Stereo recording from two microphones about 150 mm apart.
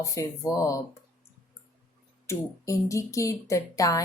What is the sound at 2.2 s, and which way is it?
Speech, 20° left (ahead or behind).